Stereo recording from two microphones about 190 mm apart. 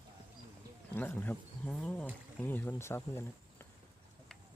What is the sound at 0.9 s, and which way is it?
Speech, 10° left (ahead or behind).